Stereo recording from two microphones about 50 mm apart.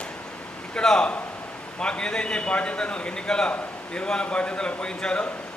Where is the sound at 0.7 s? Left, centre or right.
Centre.